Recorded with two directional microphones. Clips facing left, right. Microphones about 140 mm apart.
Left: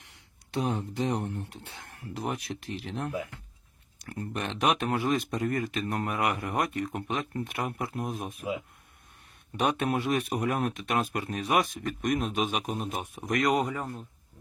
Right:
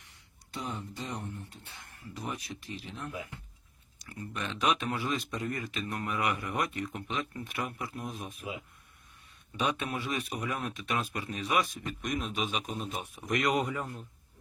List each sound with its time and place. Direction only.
0.1 s speech: 75° left (ahead or behind)
3.9 s a sound: 55° left (ahead or behind)
4.6 s speech: 50° left (ahead or behind)
9.6 s speech: 50° left (ahead or behind); by 14.0 s 35° left (ahead or behind)